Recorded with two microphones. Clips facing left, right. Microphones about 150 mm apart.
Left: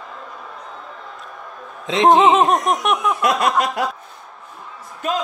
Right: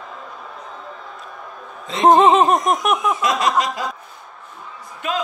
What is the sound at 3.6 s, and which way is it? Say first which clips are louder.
Speech: left 3 dB; 65° left (ahead or behind).